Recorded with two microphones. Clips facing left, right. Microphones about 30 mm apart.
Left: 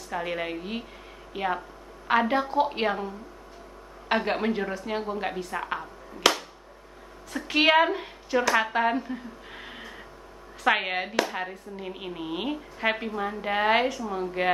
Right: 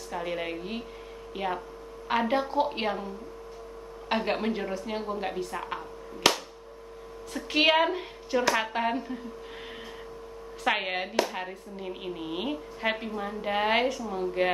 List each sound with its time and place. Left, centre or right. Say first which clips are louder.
0.1 s speech: left 2 dB; centre
4.1 s speech: left 2 dB; centre
6.1 s a sound: left 2 dB; centre
7.4 s a woman's voice: left 2 dB; centre
10.6 s speech: left 3 dB; centre
14.0 s speech: even; centre